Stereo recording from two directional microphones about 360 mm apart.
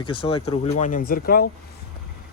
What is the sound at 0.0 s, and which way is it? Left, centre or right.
A man's voice, centre.